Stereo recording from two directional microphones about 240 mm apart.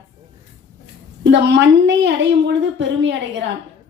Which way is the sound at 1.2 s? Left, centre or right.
Right.